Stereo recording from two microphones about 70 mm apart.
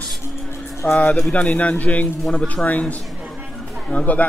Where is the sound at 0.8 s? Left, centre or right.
Centre.